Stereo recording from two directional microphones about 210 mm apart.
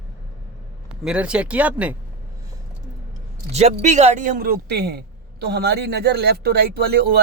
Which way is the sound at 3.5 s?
35° right (ahead or behind).